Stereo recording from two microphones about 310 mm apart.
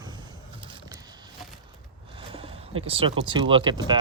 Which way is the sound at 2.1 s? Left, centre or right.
Centre.